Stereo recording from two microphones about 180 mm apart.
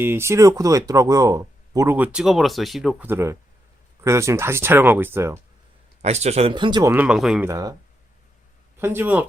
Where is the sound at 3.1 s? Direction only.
15° right (ahead or behind).